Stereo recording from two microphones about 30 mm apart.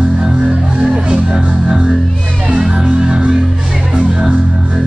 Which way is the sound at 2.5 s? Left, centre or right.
Right.